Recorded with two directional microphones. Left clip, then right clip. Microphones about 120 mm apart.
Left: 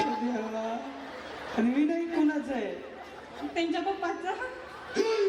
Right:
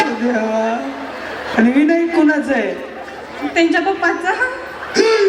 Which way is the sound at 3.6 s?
30° right (ahead or behind).